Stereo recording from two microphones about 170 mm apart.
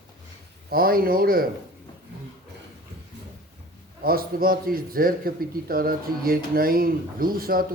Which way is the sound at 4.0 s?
60° right (ahead or behind).